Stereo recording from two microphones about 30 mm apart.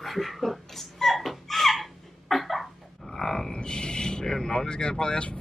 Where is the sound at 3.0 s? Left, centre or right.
Centre.